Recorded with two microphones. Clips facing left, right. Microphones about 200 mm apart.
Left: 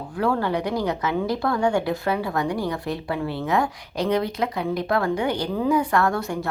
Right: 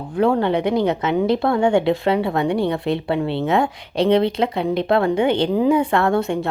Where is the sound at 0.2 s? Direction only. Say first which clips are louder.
Right 6 dB; 25° right (ahead or behind).